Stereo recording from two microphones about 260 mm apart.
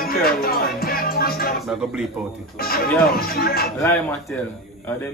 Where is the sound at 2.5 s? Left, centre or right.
Left.